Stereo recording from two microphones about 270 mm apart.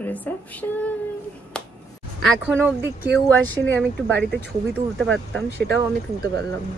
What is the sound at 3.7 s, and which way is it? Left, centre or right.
Speech, centre.